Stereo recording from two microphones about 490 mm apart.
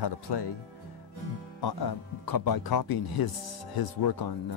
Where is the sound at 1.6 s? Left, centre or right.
Left.